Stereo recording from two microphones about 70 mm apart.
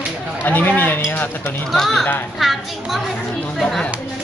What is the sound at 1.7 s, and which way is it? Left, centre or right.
Speech, centre.